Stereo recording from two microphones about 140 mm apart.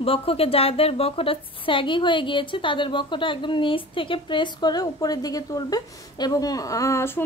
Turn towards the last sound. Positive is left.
turn(degrees=20)  # may be behind; listen again after turning